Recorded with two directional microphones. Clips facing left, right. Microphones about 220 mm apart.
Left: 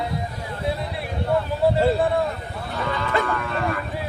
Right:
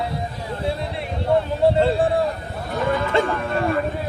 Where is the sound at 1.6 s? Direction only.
25° right (ahead or behind).